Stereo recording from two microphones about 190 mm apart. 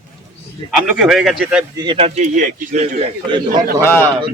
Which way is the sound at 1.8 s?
25° right (ahead or behind).